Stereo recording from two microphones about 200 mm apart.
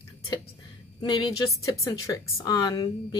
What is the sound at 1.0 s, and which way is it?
A woman's voice, 20° left (ahead or behind).